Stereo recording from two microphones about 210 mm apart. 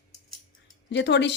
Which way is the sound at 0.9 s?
55° left (ahead or behind).